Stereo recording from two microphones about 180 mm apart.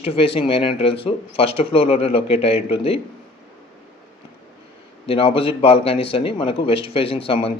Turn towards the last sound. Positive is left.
turn(degrees=30)  # may be behind; listen again after turning